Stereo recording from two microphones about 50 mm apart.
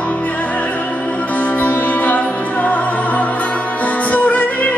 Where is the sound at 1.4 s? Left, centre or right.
Left.